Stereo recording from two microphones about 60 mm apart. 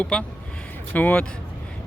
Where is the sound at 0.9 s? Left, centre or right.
Left.